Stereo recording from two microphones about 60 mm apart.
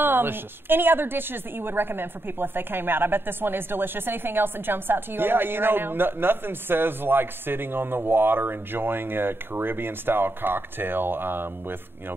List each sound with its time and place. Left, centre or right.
0.0 s a woman's voice: right